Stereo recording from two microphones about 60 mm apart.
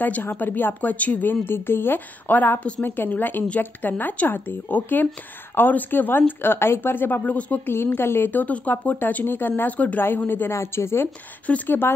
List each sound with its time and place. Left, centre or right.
0.0 s a woman's voice: left
7.3 s speech: left
7.6 s a woman's voice: left
10.5 s speech: left
11.4 s speech: left